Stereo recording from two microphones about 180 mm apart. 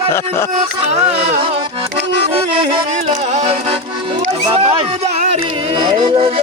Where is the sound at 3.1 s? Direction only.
40° right (ahead or behind).